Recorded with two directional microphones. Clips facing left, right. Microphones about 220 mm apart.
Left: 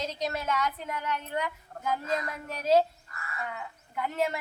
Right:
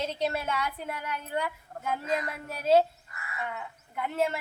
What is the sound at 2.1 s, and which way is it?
Speech, 5° right (ahead or behind).